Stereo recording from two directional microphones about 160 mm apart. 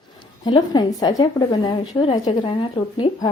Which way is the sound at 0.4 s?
25° left (ahead or behind).